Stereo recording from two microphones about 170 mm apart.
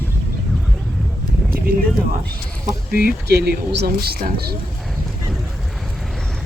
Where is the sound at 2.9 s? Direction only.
65° right (ahead or behind).